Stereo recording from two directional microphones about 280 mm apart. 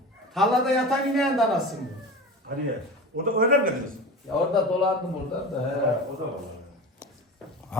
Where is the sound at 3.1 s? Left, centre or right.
Right.